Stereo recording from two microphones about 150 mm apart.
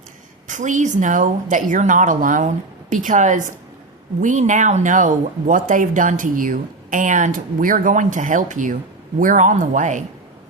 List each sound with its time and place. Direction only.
0.4 s speech: 55° right (ahead or behind)